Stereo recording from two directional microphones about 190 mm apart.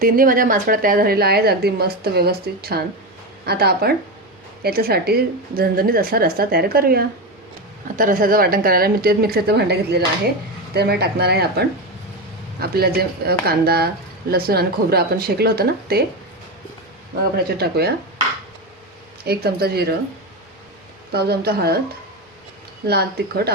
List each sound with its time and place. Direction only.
0.0 s a woman's voice: 45° right (ahead or behind)
17.3 s speech: 55° right (ahead or behind)
19.2 s speech: 55° right (ahead or behind)
21.1 s speech: 55° right (ahead or behind)
22.9 s speech: 60° right (ahead or behind)